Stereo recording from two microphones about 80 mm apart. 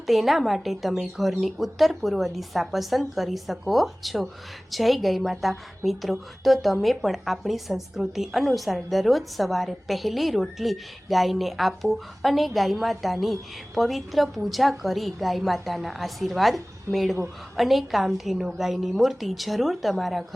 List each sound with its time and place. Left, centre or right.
0.1 s a woman's voice: centre